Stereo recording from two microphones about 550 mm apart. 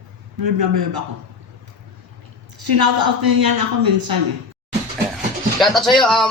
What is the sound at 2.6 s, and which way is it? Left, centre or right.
A man's voice, right.